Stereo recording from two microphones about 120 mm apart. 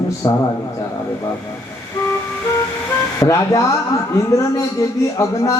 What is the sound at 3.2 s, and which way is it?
Speech, 30° left (ahead or behind).